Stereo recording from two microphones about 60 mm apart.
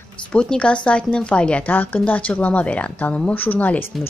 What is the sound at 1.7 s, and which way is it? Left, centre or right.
Speech, left.